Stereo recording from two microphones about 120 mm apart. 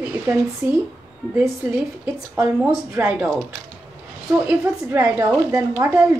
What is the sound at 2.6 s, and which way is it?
Speech, 10° right (ahead or behind).